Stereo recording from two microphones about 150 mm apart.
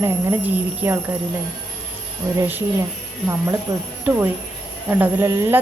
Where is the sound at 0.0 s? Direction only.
15° right (ahead or behind).